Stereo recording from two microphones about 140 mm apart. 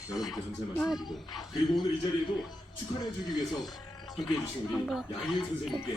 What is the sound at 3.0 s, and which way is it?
Speech, 30° left (ahead or behind).